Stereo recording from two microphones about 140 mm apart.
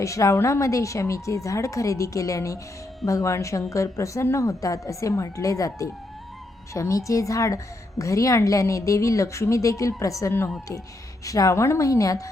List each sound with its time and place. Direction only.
0.0 s a woman's voice: 20° left (ahead or behind)